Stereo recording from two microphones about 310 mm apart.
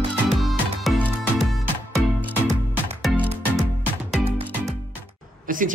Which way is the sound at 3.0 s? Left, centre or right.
Centre.